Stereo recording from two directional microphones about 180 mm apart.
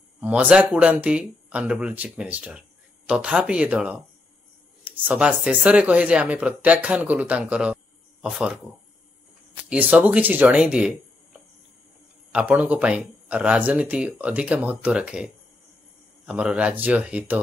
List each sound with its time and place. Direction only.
0.2 s speech: 5° right (ahead or behind)
9.7 s speech: 5° right (ahead or behind)
12.3 s speech: 5° right (ahead or behind)